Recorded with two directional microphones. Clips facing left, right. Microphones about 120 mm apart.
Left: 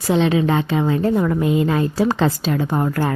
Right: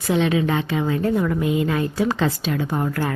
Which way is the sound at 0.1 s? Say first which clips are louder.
Left 3 dB; 30° left (ahead or behind).